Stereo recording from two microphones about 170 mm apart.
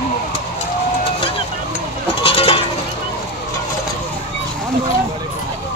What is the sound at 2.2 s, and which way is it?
Goat, 35° left (ahead or behind).